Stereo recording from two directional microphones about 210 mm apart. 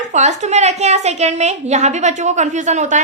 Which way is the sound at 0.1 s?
35° right (ahead or behind).